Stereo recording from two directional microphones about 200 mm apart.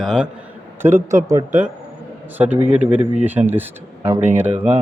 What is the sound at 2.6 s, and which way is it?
Speech, 30° right (ahead or behind).